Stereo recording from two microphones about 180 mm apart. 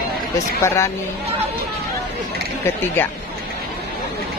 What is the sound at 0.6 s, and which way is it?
Speech, 15° left (ahead or behind).